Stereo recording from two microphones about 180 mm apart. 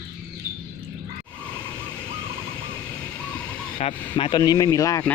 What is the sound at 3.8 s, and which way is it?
Speech, 30° left (ahead or behind).